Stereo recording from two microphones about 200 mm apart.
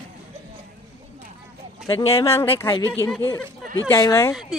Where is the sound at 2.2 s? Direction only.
15° left (ahead or behind).